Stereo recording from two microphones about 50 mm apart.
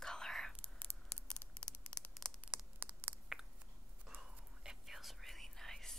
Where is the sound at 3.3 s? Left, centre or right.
Centre.